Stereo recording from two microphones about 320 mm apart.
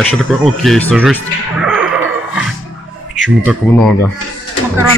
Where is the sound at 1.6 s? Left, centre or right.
Centre.